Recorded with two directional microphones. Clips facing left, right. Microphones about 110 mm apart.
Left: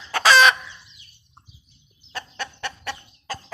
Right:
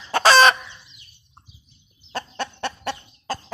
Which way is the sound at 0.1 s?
35° right (ahead or behind).